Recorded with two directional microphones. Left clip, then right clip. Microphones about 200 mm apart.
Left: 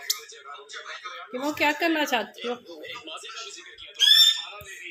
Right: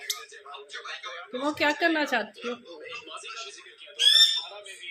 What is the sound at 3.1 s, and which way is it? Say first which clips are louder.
Speech: left 1 dB; 25° left (ahead or behind).